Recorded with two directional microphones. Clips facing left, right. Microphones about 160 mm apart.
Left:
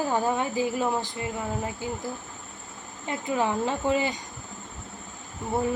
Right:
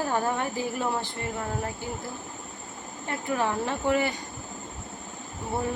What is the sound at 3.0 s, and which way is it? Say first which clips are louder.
A woman's voice: left 1 dB; 15° left (ahead or behind).